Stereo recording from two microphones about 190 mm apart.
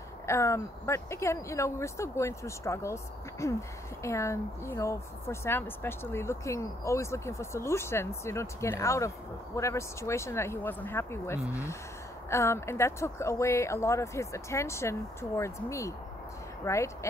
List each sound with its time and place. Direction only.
0.3 s speech: 15° left (ahead or behind)